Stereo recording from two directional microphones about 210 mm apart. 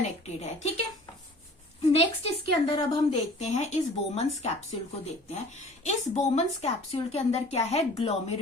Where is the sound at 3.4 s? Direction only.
30° left (ahead or behind).